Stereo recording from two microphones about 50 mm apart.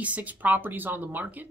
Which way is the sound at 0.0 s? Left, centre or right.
Right.